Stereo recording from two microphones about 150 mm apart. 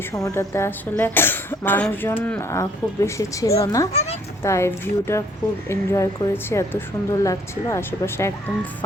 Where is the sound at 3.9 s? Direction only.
45° left (ahead or behind).